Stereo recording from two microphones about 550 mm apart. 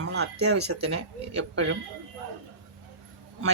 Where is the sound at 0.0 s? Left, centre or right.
Centre.